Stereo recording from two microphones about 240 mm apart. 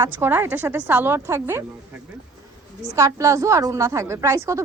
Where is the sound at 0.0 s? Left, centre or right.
Centre.